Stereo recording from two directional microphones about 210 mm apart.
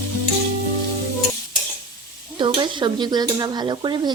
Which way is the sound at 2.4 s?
20° right (ahead or behind).